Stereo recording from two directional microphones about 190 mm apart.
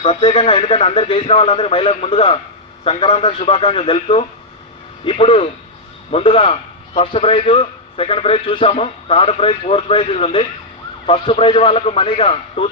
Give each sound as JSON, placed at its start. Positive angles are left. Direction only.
{"t": 0.0, "sound": "a man's voice", "side_deg": 30}